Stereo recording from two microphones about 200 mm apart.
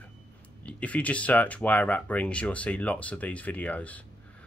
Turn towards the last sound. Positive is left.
turn(degrees=5)  # may be behind; listen again after turning